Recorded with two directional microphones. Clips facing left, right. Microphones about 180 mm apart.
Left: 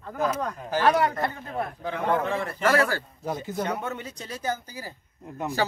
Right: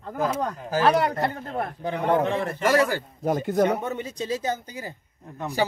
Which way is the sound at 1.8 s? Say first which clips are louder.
Right 4 dB; 20° right (ahead or behind).